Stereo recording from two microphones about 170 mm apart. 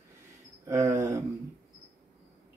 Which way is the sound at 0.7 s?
20° right (ahead or behind).